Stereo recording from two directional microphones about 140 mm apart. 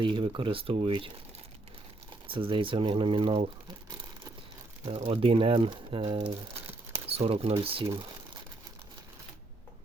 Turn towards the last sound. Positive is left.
turn(degrees=-40)  # may be behind; listen again after turning